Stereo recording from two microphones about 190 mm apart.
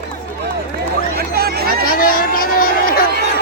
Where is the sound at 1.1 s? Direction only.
55° right (ahead or behind).